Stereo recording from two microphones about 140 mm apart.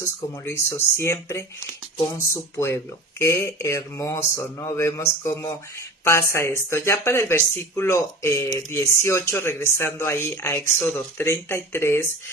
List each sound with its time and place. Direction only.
0.0 s speech: 20° left (ahead or behind)